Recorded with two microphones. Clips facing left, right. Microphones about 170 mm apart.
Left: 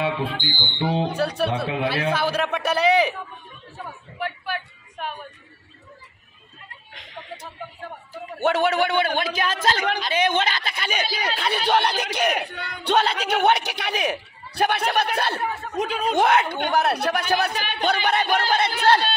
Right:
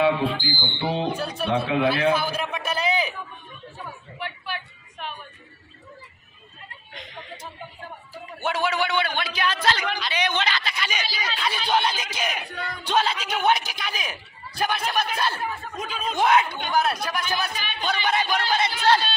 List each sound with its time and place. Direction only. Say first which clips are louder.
1.1 s a man's voice: left 2 dB; 70° left (ahead or behind)
4.2 s vehicle: left 5 dB; 50° left (ahead or behind)
8.4 s a man's voice: left 5 dB; 60° left (ahead or behind)